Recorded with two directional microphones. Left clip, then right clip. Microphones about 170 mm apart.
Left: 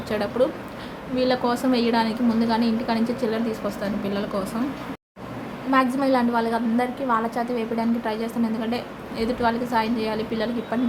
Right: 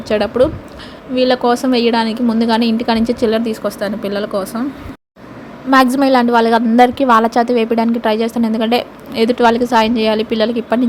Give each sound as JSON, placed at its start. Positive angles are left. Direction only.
{"t": 0.1, "sound": "a woman's voice", "side_deg": -40}
{"t": 5.7, "sound": "a woman's voice", "side_deg": -55}